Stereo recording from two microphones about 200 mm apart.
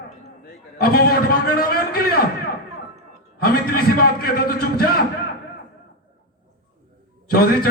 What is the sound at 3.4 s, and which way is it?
A man's voice, 50° left (ahead or behind).